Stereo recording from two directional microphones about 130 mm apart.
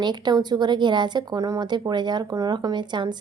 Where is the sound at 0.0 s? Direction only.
35° right (ahead or behind).